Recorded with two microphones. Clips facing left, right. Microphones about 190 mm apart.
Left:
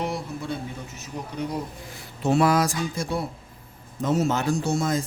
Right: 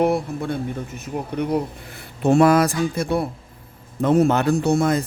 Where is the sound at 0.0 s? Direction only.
55° right (ahead or behind).